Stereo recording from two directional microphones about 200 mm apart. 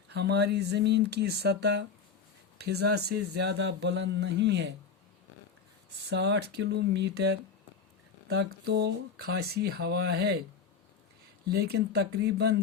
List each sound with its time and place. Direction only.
0.1 s speech: 55° right (ahead or behind)
6.1 s speech: 60° right (ahead or behind)
11.4 s speech: 50° right (ahead or behind)